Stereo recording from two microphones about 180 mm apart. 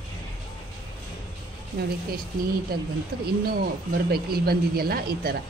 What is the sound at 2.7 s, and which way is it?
A woman's voice, 60° right (ahead or behind).